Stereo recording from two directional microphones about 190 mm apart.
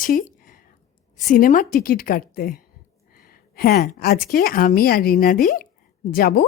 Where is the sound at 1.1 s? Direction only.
45° left (ahead or behind).